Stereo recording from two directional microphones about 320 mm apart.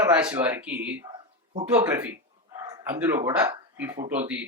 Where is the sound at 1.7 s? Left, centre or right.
Centre.